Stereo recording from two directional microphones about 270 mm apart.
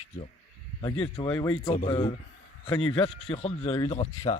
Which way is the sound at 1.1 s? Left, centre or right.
Centre.